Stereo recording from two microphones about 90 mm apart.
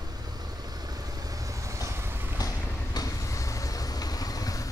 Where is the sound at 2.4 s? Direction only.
40° left (ahead or behind).